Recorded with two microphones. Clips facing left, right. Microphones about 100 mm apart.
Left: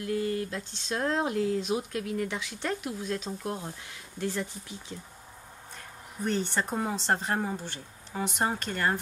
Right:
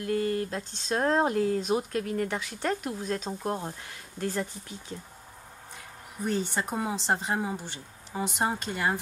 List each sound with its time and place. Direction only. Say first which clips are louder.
0.0 s speech: right 2 dB; 45° right (ahead or behind)
6.2 s speech: even; 15° right (ahead or behind)